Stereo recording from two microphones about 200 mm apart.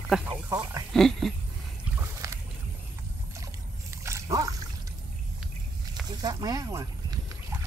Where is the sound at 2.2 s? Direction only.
15° right (ahead or behind).